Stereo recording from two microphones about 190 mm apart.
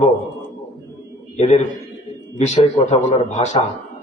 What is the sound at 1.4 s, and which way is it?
Speech, 35° left (ahead or behind).